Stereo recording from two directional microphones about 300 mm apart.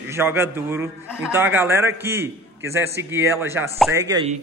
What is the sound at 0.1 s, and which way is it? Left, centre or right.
Speech, centre.